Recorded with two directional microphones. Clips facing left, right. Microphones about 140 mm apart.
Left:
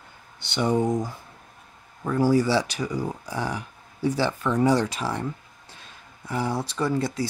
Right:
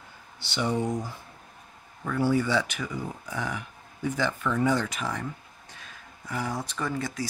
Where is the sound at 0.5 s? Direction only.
45° left (ahead or behind).